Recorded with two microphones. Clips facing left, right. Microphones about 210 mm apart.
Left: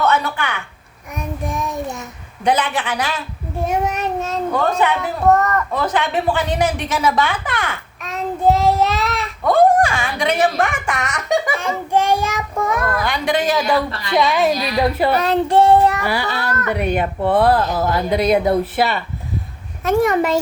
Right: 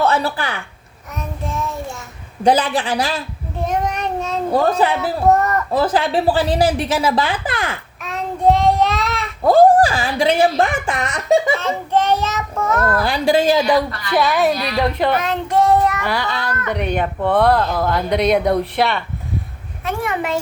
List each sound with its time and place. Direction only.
0.0 s a woman's voice: 30° right (ahead or behind)
1.1 s child singing: 15° left (ahead or behind)
2.4 s speech: 35° right (ahead or behind)
3.6 s child singing: 10° left (ahead or behind)
4.5 s speech: 35° right (ahead or behind)
8.0 s child singing: centre (ahead or behind)
9.4 s speech: 30° right (ahead or behind)
11.6 s child singing: 10° left (ahead or behind)
12.8 s a woman's voice: 30° right (ahead or behind)
14.2 s speech: centre (ahead or behind)
15.1 s child singing: 35° left (ahead or behind)
16.0 s child singing: 10° left (ahead or behind)
17.7 s speech: 5° left (ahead or behind)
19.8 s a child's voice: 40° left (ahead or behind)